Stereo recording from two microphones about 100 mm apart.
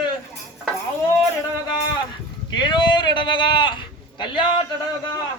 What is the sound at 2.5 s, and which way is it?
A man's voice, 50° left (ahead or behind).